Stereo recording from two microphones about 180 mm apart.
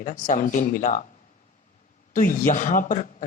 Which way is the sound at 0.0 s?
45° left (ahead or behind).